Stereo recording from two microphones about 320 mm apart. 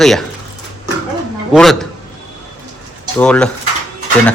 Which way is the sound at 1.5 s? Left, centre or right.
Centre.